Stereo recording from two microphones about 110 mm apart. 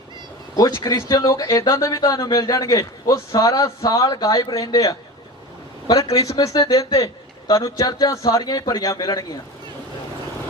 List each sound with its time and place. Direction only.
0.8 s a man's voice: 30° left (ahead or behind)